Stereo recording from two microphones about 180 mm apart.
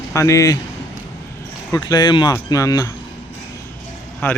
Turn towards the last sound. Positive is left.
turn(degrees=10)  # may be behind; listen again after turning